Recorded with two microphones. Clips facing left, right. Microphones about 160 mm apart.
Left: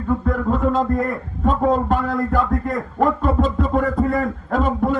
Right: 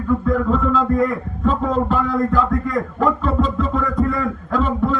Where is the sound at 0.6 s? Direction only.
45° left (ahead or behind).